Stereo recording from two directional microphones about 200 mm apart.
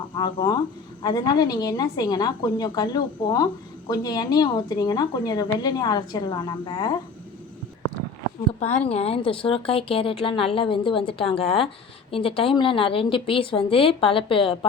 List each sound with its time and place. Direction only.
0.2 s speech: 20° left (ahead or behind)
8.5 s speech: 35° left (ahead or behind)